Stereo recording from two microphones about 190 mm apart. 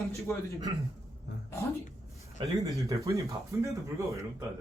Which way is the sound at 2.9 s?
15° right (ahead or behind).